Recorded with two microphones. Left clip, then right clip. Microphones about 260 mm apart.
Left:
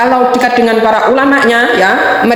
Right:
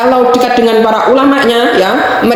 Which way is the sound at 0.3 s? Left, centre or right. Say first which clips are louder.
Right 1 dB; left.